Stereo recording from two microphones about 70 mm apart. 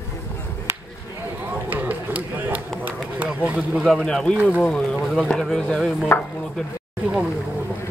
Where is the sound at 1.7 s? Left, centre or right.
Right.